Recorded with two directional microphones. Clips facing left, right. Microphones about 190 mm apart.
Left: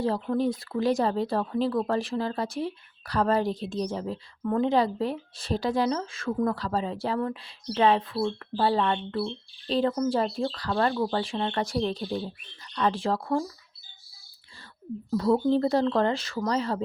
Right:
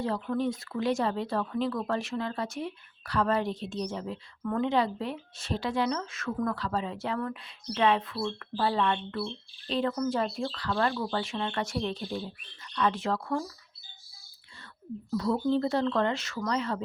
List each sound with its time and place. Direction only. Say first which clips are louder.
0.0 s speech: left 4 dB; 30° left (ahead or behind)
15.1 s speech: left 4 dB; 35° left (ahead or behind)